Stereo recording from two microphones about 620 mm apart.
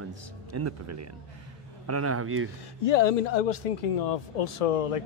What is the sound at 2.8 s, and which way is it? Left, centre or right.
Speech, left.